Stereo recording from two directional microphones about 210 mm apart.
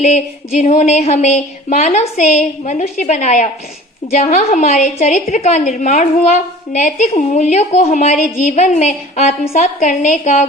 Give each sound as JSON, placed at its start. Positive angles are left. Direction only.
{"t": 0.0, "sound": "a woman's voice", "side_deg": 35}